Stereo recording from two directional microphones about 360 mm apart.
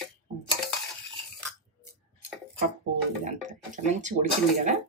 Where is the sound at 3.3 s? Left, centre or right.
Centre.